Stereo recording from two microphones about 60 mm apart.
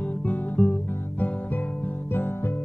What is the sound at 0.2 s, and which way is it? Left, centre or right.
Guitar, left.